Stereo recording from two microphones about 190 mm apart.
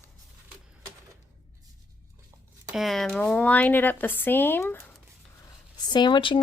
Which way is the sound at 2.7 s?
Centre (ahead or behind).